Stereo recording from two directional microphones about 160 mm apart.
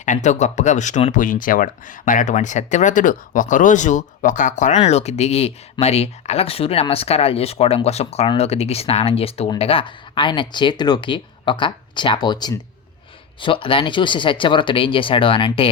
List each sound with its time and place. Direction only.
0.0 s speech: 50° left (ahead or behind); by 15.7 s 35° left (ahead or behind)